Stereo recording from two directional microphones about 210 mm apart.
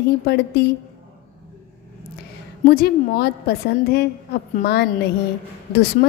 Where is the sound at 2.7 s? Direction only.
45° left (ahead or behind).